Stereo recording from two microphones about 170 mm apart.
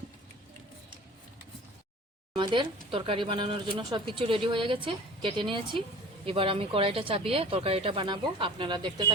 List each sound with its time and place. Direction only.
2.3 s speech: 30° right (ahead or behind)